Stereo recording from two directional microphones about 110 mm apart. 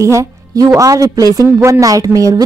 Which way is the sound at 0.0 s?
30° right (ahead or behind).